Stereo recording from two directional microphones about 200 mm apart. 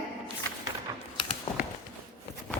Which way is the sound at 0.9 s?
15° right (ahead or behind).